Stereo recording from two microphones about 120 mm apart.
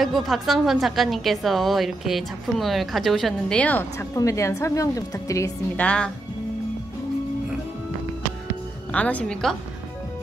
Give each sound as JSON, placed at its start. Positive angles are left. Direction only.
{"t": 0.0, "sound": "a woman's voice", "side_deg": 0}
{"t": 4.1, "sound": "a woman's voice", "side_deg": 25}
{"t": 5.8, "sound": "a woman's voice", "side_deg": 10}
{"t": 8.9, "sound": "a woman's voice", "side_deg": 10}